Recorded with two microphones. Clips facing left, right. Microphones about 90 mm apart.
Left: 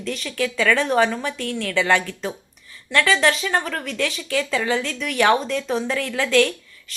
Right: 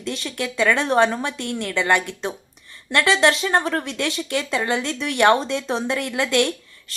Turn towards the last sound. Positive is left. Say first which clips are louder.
# left 2 dB
turn(degrees=-15)  # may be behind; listen again after turning